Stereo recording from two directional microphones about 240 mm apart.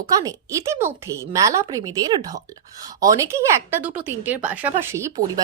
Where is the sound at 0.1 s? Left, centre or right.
Centre.